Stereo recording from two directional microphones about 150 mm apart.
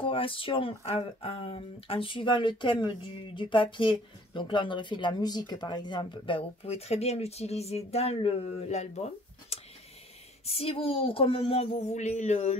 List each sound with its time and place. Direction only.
0.0 s speech: 35° left (ahead or behind)